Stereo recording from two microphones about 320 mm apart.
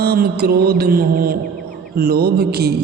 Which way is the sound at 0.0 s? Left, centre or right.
Right.